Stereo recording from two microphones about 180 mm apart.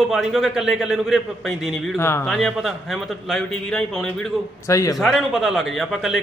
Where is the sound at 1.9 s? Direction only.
15° left (ahead or behind).